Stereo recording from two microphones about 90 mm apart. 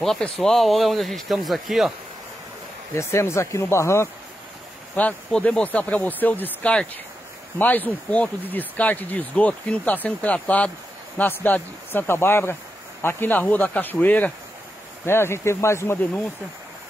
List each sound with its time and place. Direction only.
0.0 s speech: 5° left (ahead or behind)
2.9 s speech: 30° left (ahead or behind)
4.9 s speech: 15° left (ahead or behind)